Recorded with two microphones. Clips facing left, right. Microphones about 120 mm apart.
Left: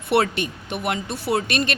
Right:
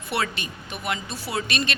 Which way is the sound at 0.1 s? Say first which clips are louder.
Left 8 dB; 60° left (ahead or behind).